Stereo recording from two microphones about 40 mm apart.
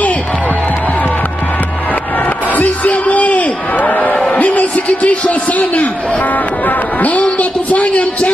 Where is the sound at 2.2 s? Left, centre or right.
Left.